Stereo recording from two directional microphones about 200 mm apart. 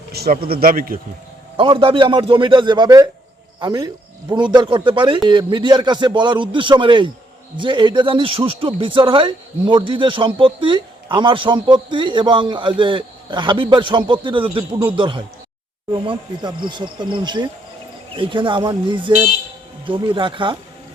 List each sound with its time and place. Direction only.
0.1 s speech: 50° right (ahead or behind)
1.5 s a man's voice: 25° right (ahead or behind)